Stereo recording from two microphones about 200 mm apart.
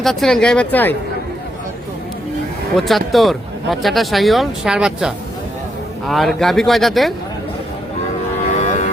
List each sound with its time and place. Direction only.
0.0 s speech: centre (ahead or behind)
2.7 s speech: centre (ahead or behind)
8.6 s a sound: 40° left (ahead or behind)